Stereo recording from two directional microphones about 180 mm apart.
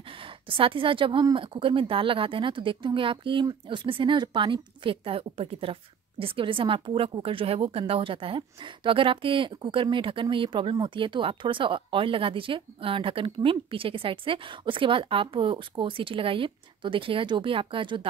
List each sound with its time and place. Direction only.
0.2 s a woman's voice: 30° right (ahead or behind)